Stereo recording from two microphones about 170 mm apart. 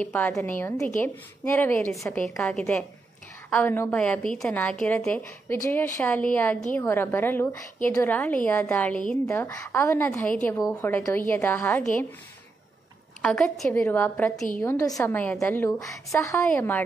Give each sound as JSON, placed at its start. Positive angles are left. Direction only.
{"t": 0.0, "sound": "a woman's voice", "side_deg": 10}
{"t": 2.4, "sound": "a woman's voice", "side_deg": 5}
{"t": 9.3, "sound": "a woman's voice", "side_deg": 15}
{"t": 13.2, "sound": "a woman's voice", "side_deg": 5}